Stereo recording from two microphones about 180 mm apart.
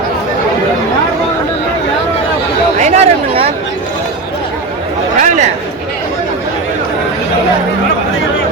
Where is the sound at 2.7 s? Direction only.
40° right (ahead or behind).